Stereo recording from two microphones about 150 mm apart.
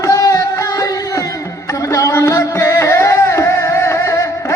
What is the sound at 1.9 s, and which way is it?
Music, 20° left (ahead or behind).